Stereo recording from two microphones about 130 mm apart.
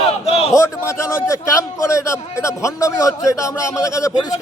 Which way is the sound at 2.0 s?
20° left (ahead or behind).